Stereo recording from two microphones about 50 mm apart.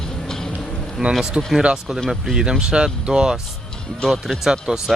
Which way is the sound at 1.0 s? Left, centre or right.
Centre.